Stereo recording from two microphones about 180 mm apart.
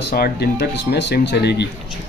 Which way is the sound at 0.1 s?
60° left (ahead or behind).